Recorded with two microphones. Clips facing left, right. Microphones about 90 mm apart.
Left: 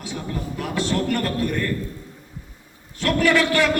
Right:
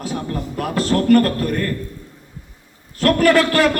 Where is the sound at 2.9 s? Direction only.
45° right (ahead or behind).